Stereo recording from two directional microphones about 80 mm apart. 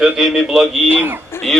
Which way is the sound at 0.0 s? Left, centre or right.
Centre.